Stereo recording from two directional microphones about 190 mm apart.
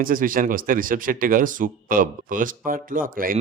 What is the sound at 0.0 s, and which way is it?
Speech, 45° right (ahead or behind).